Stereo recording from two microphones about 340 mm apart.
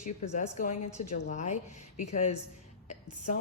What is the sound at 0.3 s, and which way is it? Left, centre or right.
A woman's voice, left.